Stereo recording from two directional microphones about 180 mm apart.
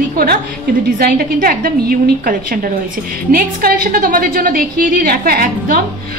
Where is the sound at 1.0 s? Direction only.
55° right (ahead or behind).